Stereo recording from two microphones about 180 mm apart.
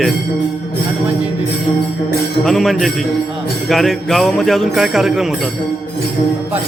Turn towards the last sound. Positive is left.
turn(degrees=0)  # may be behind; listen again after turning